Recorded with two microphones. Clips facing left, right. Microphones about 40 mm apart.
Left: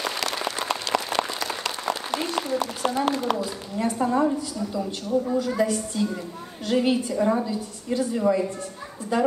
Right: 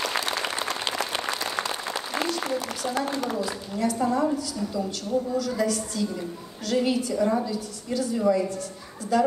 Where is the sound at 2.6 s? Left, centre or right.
Left.